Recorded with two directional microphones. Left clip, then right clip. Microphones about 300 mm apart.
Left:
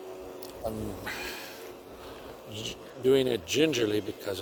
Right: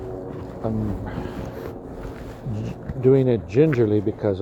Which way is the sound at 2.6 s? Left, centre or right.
Left.